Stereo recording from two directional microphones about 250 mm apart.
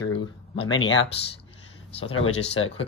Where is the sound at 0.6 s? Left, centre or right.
Left.